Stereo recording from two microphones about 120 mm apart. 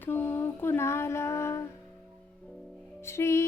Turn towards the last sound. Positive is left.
turn(degrees=25)  # may be behind; listen again after turning